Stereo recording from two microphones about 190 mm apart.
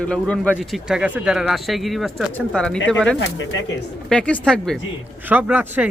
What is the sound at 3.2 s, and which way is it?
Speech, 80° left.